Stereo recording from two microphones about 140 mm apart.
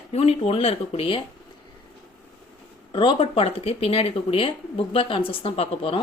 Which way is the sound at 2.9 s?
35° left (ahead or behind).